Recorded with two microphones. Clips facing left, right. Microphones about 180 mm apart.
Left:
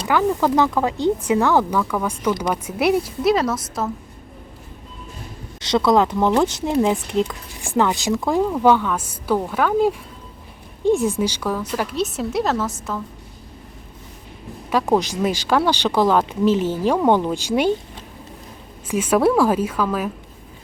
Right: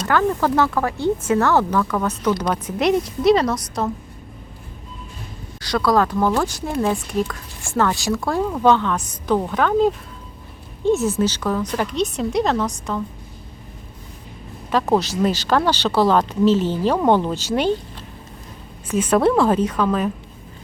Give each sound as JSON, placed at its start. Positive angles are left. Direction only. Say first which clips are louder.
{"t": 0.0, "sound": "speech", "louder": "even", "side_deg": 10}
{"t": 5.5, "sound": "speech", "louder": "left 2 dB", "side_deg": 20}
{"t": 14.7, "sound": "speech", "louder": "even", "side_deg": 10}
{"t": 18.9, "sound": "speech", "louder": "even", "side_deg": 10}